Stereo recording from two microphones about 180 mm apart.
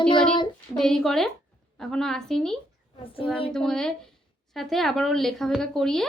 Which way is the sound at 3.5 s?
5° left (ahead or behind).